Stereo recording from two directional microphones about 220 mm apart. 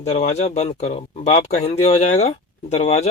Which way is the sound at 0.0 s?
30° left (ahead or behind).